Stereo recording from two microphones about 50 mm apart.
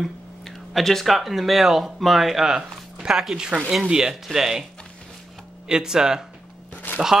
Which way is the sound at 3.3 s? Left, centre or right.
Centre.